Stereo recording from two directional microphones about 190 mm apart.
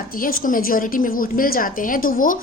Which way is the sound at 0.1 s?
50° left (ahead or behind).